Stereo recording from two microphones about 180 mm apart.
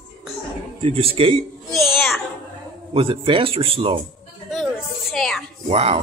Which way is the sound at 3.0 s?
30° right (ahead or behind).